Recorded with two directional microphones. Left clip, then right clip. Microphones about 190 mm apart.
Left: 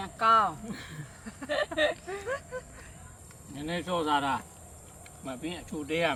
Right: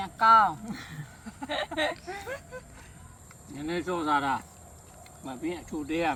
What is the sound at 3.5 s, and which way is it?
Speech, 20° left (ahead or behind).